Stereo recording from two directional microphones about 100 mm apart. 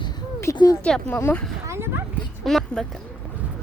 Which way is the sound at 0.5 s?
40° left (ahead or behind).